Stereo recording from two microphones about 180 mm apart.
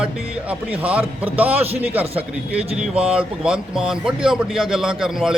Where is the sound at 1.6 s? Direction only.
35° right (ahead or behind).